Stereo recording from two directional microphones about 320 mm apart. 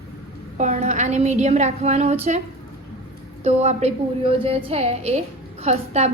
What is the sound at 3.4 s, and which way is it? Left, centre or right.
A woman's voice, right.